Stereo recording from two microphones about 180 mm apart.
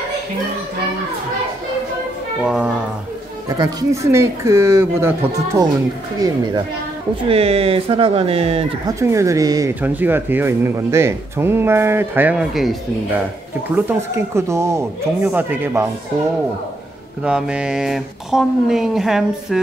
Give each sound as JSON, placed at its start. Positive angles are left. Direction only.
{"t": 2.4, "sound": "speech", "side_deg": -5}
{"t": 3.4, "sound": "speech", "side_deg": -15}
{"t": 7.2, "sound": "speech", "side_deg": -35}
{"t": 8.8, "sound": "speech", "side_deg": -15}
{"t": 13.7, "sound": "speech", "side_deg": -15}
{"t": 17.2, "sound": "speech", "side_deg": -5}